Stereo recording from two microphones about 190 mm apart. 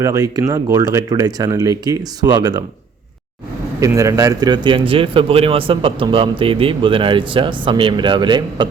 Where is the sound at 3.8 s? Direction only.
15° right (ahead or behind).